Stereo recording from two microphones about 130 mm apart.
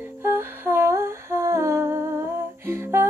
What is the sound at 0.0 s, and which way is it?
Humming, 15° right (ahead or behind).